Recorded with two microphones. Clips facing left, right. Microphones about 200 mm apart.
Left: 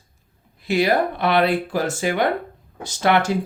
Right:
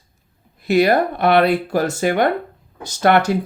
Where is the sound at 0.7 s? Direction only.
40° right (ahead or behind).